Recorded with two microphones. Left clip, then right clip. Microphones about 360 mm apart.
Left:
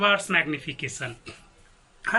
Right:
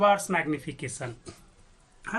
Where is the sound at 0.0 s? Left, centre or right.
Centre.